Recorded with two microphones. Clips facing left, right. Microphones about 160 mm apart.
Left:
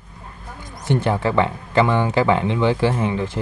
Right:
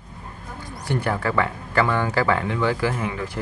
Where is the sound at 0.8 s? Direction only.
25° left (ahead or behind).